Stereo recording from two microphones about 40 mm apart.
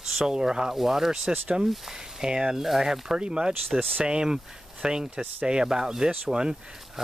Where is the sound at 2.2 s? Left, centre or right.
Centre.